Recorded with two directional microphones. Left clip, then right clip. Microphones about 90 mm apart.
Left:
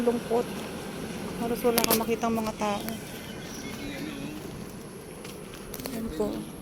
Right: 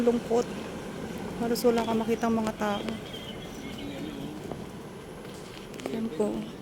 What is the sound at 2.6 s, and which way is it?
Speech, 35° right (ahead or behind).